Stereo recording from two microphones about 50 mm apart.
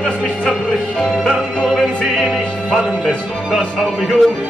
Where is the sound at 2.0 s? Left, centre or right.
Centre.